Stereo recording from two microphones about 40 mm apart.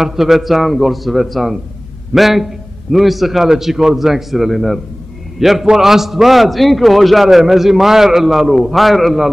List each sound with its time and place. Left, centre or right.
0.0 s a man's voice: centre